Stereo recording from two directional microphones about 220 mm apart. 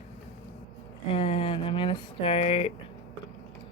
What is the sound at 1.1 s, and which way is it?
Speech, 25° left (ahead or behind).